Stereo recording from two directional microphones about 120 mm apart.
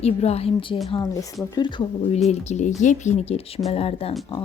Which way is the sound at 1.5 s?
40° left (ahead or behind).